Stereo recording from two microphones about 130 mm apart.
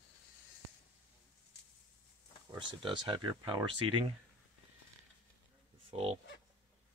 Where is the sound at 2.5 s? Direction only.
35° right (ahead or behind).